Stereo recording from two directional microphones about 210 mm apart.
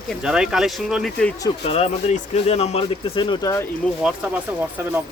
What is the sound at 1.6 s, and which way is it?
Speech, 30° left (ahead or behind).